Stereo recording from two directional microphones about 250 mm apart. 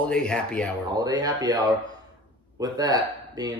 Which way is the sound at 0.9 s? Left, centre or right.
Centre.